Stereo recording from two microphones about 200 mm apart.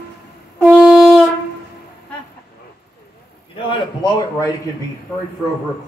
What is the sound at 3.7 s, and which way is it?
Speech, 20° left (ahead or behind).